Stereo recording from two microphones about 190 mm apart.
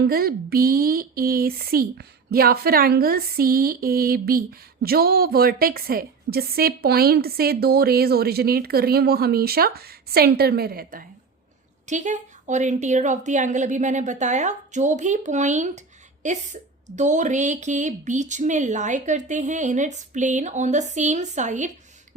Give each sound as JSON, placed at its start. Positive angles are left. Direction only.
{"t": 0.0, "sound": "speech", "side_deg": -55}
{"t": 11.9, "sound": "a woman's voice", "side_deg": -40}